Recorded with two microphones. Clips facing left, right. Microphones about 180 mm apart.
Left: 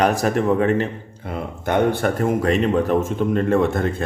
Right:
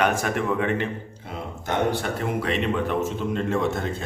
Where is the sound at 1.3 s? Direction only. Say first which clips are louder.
Left 7 dB; 55° left (ahead or behind).